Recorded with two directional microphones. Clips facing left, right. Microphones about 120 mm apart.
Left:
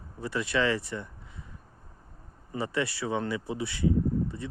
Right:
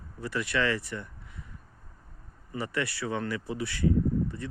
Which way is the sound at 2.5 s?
20° left (ahead or behind).